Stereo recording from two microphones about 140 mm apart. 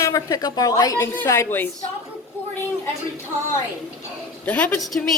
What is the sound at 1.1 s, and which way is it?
Speech, 15° left (ahead or behind).